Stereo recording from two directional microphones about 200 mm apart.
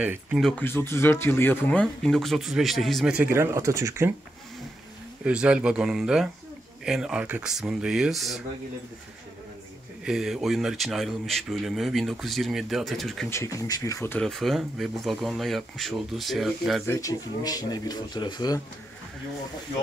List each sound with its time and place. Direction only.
0.0 s speech: 5° right (ahead or behind)
5.2 s speech: 5° right (ahead or behind)
10.0 s speech: centre (ahead or behind)
13.3 s speech: 15° left (ahead or behind)
16.8 s speech: 15° left (ahead or behind)